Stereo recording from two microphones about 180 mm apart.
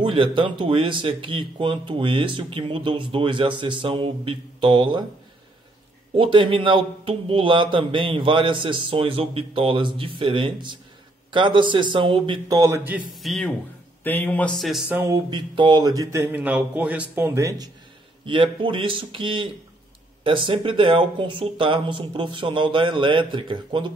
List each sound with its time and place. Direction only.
0.0 s speech: 30° right (ahead or behind)
6.1 s speech: 30° right (ahead or behind); by 13.0 s 10° right (ahead or behind)
13.1 s speech: centre (ahead or behind)
15.0 s speech: 15° right (ahead or behind)
18.2 s speech: 30° right (ahead or behind)